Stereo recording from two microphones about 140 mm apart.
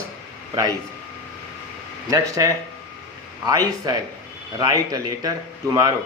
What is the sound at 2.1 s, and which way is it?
Speech, 25° right (ahead or behind).